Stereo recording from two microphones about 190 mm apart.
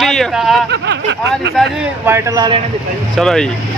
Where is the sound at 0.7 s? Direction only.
70° right (ahead or behind).